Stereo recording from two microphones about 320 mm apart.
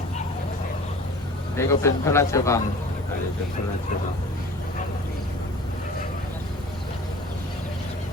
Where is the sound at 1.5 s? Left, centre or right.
Centre.